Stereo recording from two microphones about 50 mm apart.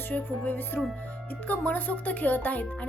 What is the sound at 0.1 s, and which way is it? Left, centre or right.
A woman's voice, left.